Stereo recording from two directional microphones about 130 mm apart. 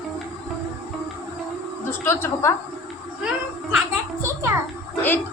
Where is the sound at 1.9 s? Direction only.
20° left (ahead or behind).